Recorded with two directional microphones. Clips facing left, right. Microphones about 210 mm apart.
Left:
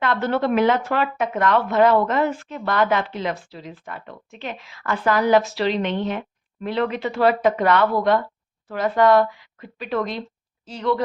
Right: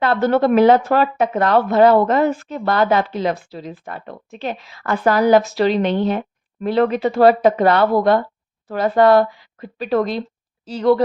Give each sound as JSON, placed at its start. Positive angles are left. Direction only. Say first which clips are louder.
{"t": 0.0, "sound": "speech", "louder": "right 6 dB", "side_deg": -40}